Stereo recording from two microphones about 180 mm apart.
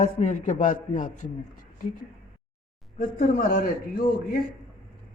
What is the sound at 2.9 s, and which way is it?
Speech, 55° left (ahead or behind).